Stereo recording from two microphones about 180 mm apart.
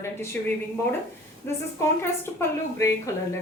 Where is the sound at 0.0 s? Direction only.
15° left (ahead or behind).